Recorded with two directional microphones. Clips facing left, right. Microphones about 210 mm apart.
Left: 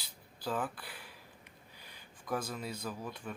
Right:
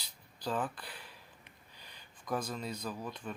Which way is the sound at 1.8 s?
10° left (ahead or behind).